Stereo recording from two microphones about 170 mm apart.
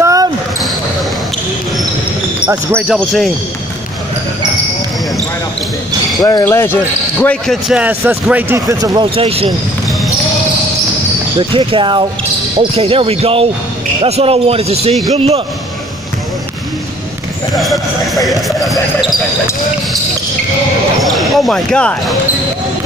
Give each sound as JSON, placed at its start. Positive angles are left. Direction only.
{"t": 0.0, "sound": "basketball bounce", "side_deg": -20}
{"t": 2.4, "sound": "speech", "side_deg": -5}
{"t": 6.4, "sound": "speech", "side_deg": 15}
{"t": 9.1, "sound": "a man's voice", "side_deg": -35}
{"t": 11.3, "sound": "a man's voice", "side_deg": -30}
{"t": 17.6, "sound": "speech", "side_deg": 0}
{"t": 21.0, "sound": "speech", "side_deg": 0}